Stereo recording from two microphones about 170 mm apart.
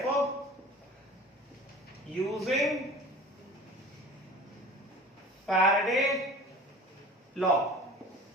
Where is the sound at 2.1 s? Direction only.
Centre (ahead or behind).